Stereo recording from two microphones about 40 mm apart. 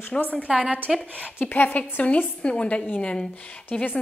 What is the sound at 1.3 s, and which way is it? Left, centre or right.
Speech, left.